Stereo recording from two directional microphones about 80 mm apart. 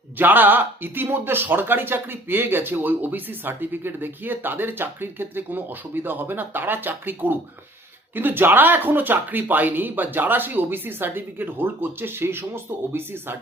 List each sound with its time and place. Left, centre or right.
0.2 s speech: right